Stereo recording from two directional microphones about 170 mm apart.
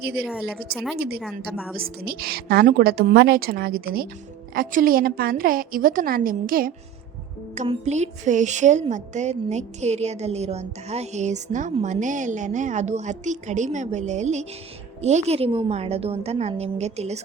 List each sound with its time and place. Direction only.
0.0 s a woman's voice: 65° right (ahead or behind)
0.3 s a woman's voice: 5° right (ahead or behind)
0.9 s a woman's voice: 70° right (ahead or behind)
7.5 s a woman's voice: 40° right (ahead or behind)